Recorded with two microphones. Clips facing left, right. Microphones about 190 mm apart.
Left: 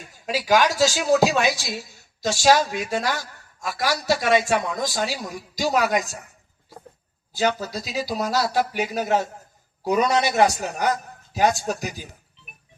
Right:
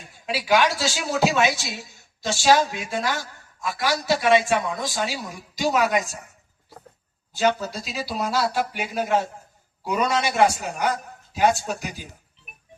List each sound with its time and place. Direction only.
0.3 s a woman's voice: 40° left (ahead or behind)
7.3 s a woman's voice: 40° left (ahead or behind)